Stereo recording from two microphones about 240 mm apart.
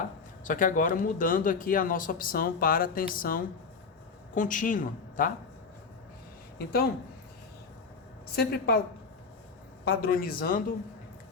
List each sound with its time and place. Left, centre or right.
0.4 s speech: left
6.6 s speech: left
8.4 s speech: left
10.0 s speech: left